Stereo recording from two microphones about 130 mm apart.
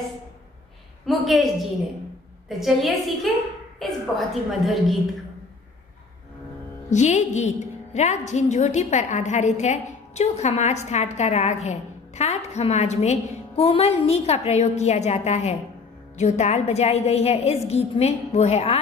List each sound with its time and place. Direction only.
1.0 s a woman's voice: centre (ahead or behind)
6.9 s a woman's voice: 65° left (ahead or behind)